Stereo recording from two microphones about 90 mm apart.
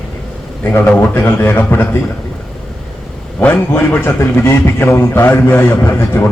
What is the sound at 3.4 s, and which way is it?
A man's voice, 25° left (ahead or behind).